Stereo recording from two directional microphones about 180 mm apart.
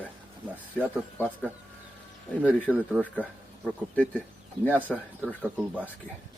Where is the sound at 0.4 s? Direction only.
10° right (ahead or behind).